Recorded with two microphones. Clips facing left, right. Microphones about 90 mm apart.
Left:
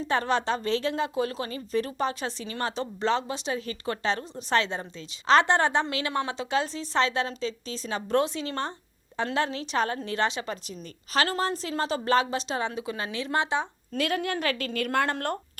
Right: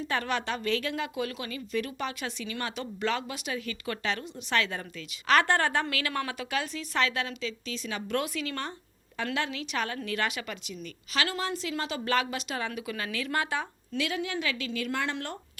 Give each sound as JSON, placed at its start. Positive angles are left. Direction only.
{"t": 0.0, "sound": "a woman's voice", "side_deg": 30}
{"t": 13.9, "sound": "a woman's voice", "side_deg": 50}